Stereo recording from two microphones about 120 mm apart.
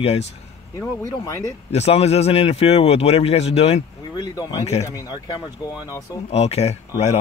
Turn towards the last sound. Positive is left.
turn(degrees=60)  # may be behind; listen again after turning